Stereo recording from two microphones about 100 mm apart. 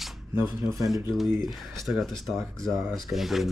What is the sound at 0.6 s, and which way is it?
Speech, centre (ahead or behind).